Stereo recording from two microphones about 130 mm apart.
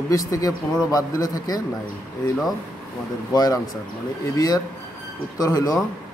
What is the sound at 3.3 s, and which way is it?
Speech, 30° left (ahead or behind).